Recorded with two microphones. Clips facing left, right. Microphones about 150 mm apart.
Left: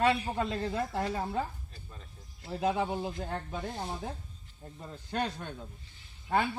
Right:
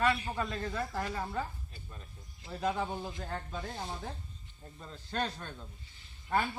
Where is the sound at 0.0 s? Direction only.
25° left (ahead or behind).